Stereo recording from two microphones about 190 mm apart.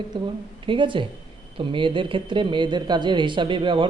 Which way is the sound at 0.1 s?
25° right (ahead or behind).